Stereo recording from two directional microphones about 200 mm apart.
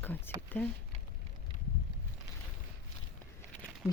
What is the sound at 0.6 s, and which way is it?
Speech, 5° left (ahead or behind).